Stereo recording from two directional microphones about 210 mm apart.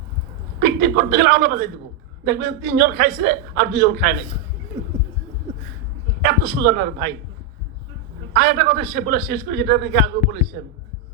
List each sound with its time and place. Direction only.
0.6 s a man's voice: 50° right (ahead or behind)
6.2 s a man's voice: 50° right (ahead or behind)
8.3 s a man's voice: 45° right (ahead or behind)